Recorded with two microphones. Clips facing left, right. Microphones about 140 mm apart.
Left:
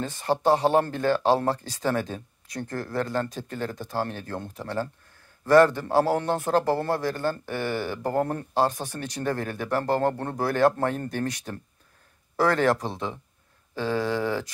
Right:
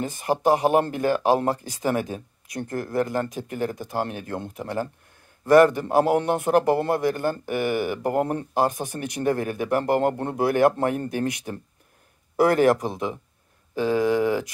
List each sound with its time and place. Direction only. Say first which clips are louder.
0.0 s a man's voice: right 2 dB; 15° right (ahead or behind)